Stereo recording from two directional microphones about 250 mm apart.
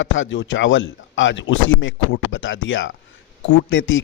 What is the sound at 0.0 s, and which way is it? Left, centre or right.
A man's voice, left.